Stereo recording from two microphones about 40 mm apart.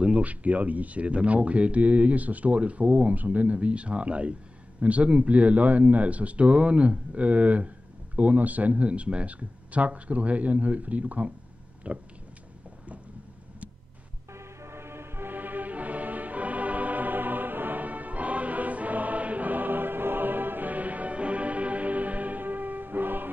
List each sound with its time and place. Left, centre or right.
0.2 s speech: right
14.3 s music: right